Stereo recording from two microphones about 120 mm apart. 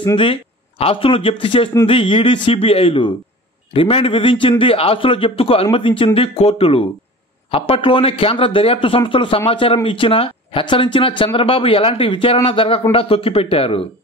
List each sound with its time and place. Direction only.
0.0 s a man's voice: 45° left (ahead or behind)